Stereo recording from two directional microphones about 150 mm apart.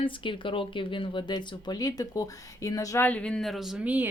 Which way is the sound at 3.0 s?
10° left (ahead or behind).